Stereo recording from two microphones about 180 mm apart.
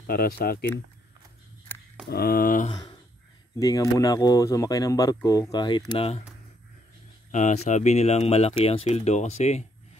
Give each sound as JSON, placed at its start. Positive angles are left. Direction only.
{"t": 0.0, "sound": "speech", "side_deg": 60}
{"t": 2.0, "sound": "speech", "side_deg": 60}
{"t": 3.5, "sound": "speech", "side_deg": 20}
{"t": 7.2, "sound": "speech", "side_deg": 40}